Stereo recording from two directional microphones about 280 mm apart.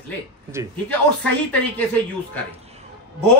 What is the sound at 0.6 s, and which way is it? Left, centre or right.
Speech, centre.